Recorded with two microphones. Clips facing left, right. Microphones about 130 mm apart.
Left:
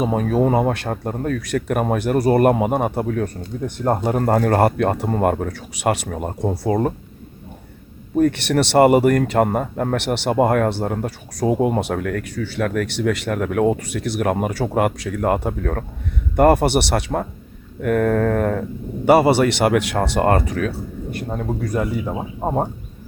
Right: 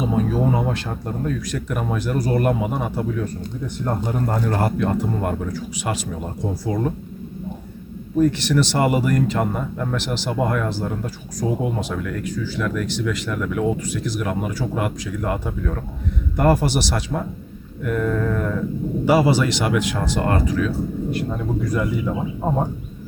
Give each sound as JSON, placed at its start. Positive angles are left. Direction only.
{"t": 0.0, "sound": "speech", "side_deg": 55}
{"t": 8.2, "sound": "speech", "side_deg": 60}